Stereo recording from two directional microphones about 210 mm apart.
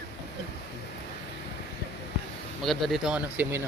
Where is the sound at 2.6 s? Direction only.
Centre (ahead or behind).